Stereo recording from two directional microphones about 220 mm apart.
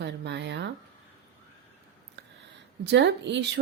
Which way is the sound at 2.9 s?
55° right (ahead or behind).